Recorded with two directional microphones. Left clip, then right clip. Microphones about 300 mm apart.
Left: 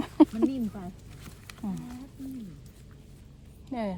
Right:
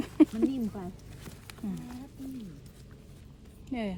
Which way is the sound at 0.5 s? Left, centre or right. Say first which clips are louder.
Left 1 dB; right.